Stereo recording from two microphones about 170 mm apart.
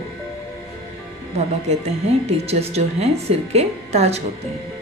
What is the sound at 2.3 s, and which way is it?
Speech, 40° right (ahead or behind).